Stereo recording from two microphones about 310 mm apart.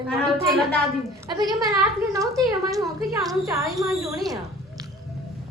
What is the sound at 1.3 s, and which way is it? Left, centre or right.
Speech, centre.